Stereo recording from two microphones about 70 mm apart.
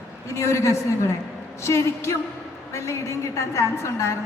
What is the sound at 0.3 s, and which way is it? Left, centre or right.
A man's voice, left.